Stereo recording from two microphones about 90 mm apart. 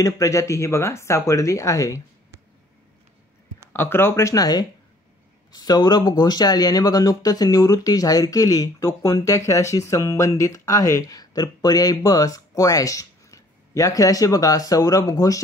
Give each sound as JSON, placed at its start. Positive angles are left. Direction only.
{"t": 0.0, "sound": "speech", "side_deg": 35}
{"t": 3.7, "sound": "speech", "side_deg": 25}